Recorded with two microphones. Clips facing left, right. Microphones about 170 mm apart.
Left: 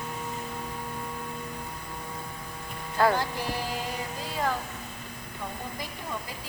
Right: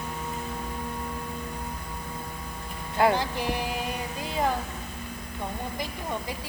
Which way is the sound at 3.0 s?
20° right (ahead or behind).